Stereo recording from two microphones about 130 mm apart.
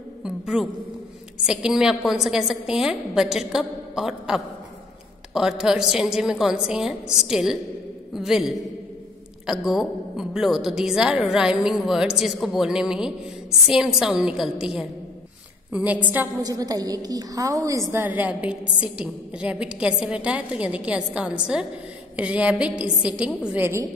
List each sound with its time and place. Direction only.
0.2 s a woman's voice: 5° right (ahead or behind)
16.4 s a woman's voice: 30° right (ahead or behind)
17.9 s a woman's voice: 15° right (ahead or behind)